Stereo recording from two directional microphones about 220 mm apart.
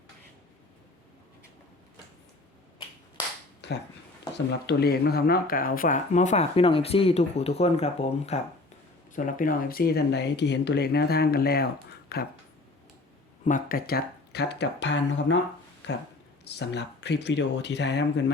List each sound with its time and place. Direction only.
3.6 s speech: 50° left (ahead or behind)
13.4 s speech: 40° left (ahead or behind); by 15.4 s 55° left (ahead or behind)
16.5 s speech: 50° left (ahead or behind)